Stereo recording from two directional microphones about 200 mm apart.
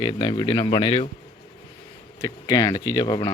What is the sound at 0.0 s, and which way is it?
Speech, 25° left (ahead or behind).